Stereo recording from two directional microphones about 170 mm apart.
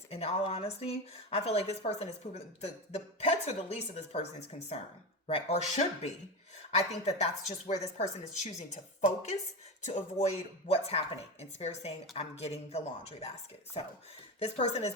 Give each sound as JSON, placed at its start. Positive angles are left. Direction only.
{"t": 0.1, "sound": "speech", "side_deg": 35}
{"t": 14.3, "sound": "speech", "side_deg": 40}